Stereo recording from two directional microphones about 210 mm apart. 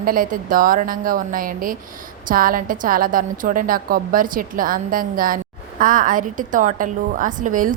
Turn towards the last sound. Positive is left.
turn(degrees=-40)  # may be behind; listen again after turning